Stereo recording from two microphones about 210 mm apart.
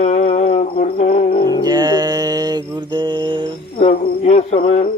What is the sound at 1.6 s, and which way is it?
Mantra, 20° right (ahead or behind).